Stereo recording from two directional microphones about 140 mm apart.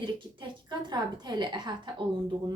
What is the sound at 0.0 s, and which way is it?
A woman's voice, 35° right (ahead or behind).